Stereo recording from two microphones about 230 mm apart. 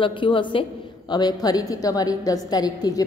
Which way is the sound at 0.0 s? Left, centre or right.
Left.